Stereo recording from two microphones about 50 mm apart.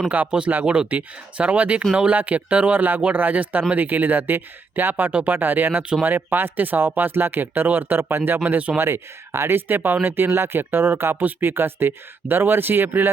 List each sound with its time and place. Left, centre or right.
0.3 s speech: right
0.9 s speech: right
8.4 s speech: right
8.8 s speech: right